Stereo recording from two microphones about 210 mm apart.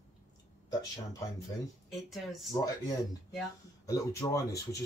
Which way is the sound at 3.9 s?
15° left (ahead or behind).